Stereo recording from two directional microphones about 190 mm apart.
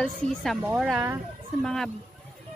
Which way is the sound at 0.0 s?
Centre (ahead or behind).